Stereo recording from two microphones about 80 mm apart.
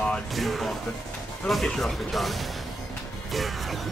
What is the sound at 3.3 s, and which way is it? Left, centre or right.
Music, centre.